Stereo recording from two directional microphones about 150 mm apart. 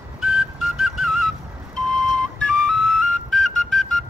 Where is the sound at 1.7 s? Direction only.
5° left (ahead or behind).